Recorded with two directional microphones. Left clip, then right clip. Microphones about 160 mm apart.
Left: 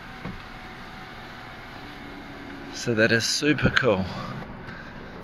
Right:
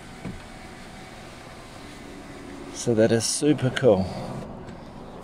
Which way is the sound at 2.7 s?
35° right (ahead or behind).